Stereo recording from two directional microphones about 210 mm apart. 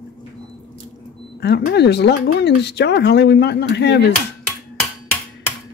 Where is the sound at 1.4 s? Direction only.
50° left (ahead or behind).